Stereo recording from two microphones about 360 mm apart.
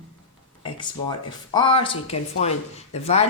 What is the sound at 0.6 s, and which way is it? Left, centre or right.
A woman's voice, centre.